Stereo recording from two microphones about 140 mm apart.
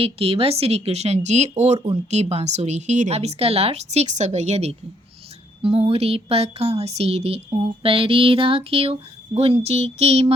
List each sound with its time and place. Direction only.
0.0 s speech: 40° right (ahead or behind)